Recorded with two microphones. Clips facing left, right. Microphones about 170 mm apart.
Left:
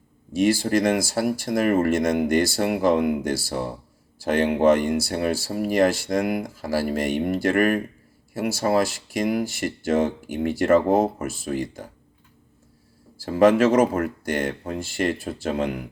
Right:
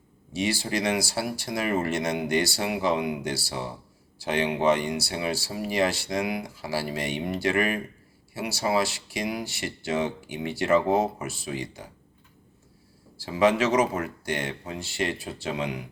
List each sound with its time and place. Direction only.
0.3 s speech: 50° left (ahead or behind)
13.1 s speech: 50° left (ahead or behind)